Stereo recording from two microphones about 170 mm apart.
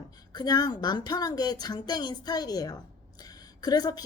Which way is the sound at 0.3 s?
25° left (ahead or behind).